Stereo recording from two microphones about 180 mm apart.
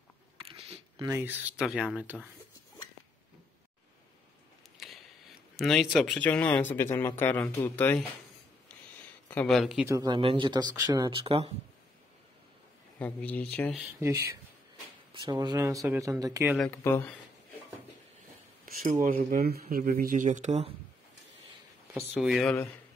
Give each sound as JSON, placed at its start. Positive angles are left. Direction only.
{"t": 0.4, "sound": "a sound", "side_deg": -35}
{"t": 1.0, "sound": "speech", "side_deg": -10}
{"t": 4.7, "sound": "a sound", "side_deg": 0}
{"t": 5.6, "sound": "speech", "side_deg": 0}
{"t": 9.3, "sound": "speech", "side_deg": 5}
{"t": 9.8, "sound": "speech", "side_deg": -20}
{"t": 13.0, "sound": "speech", "side_deg": 10}
{"t": 13.7, "sound": "speech", "side_deg": -10}
{"t": 15.1, "sound": "speech", "side_deg": -25}
{"t": 16.8, "sound": "speech", "side_deg": 15}
{"t": 18.7, "sound": "speech", "side_deg": -50}
{"t": 21.9, "sound": "speech", "side_deg": -5}